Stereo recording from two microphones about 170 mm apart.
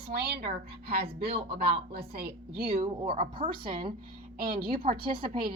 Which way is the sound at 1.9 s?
65° right (ahead or behind).